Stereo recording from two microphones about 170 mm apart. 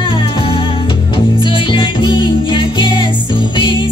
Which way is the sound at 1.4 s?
30° left (ahead or behind).